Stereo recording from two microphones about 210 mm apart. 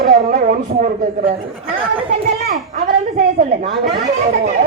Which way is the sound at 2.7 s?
40° right (ahead or behind).